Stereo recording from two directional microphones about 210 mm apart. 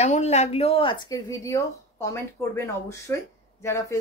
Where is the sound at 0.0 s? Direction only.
30° left (ahead or behind); by 3.2 s 15° left (ahead or behind).